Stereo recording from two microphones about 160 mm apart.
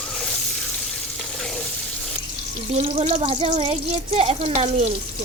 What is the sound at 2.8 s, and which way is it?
Speech, 45° right (ahead or behind).